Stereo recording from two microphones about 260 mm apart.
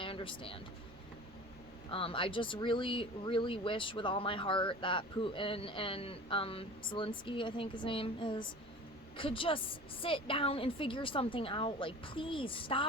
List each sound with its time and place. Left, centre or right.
0.0 s vehicle: centre
1.9 s speech: left